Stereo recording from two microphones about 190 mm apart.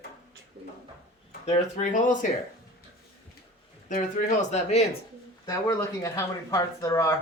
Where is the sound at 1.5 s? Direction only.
40° left (ahead or behind).